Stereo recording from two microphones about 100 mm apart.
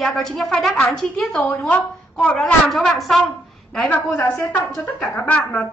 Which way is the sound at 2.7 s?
Centre (ahead or behind).